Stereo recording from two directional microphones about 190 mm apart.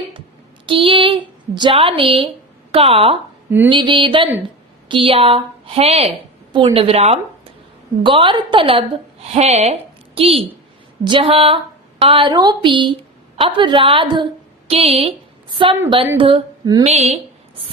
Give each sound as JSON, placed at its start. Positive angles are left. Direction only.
{"t": 0.6, "sound": "a woman's voice", "side_deg": -25}
{"t": 16.8, "sound": "a woman's voice", "side_deg": -35}